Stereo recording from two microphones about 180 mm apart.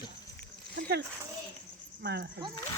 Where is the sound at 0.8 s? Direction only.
70° right (ahead or behind).